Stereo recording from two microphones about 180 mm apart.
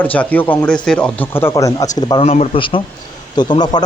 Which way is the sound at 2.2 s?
35° left (ahead or behind).